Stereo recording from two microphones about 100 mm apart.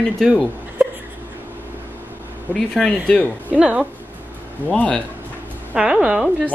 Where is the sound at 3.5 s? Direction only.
10° right (ahead or behind).